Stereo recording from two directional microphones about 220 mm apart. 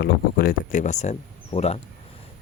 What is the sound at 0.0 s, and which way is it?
Speech, 40° left (ahead or behind).